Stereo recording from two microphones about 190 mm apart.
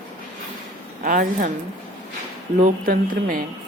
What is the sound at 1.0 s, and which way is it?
Speech, 45° right (ahead or behind).